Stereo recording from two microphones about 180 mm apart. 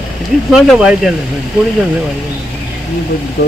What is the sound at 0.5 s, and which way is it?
Speech, centre (ahead or behind).